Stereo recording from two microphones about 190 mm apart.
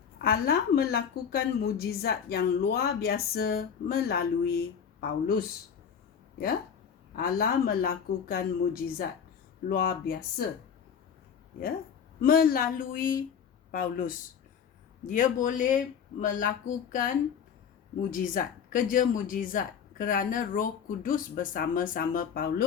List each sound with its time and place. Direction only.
0.2 s a woman's voice: 55° left (ahead or behind)
7.2 s a woman's voice: 50° left (ahead or behind)
12.2 s speech: 50° left (ahead or behind)